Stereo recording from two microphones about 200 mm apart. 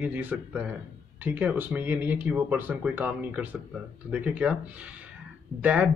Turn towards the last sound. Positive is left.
turn(degrees=-5)  # may be behind; listen again after turning